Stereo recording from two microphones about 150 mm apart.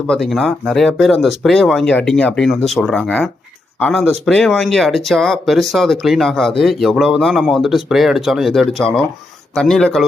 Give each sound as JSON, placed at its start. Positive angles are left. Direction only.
{"t": 0.1, "sound": "speech", "side_deg": 0}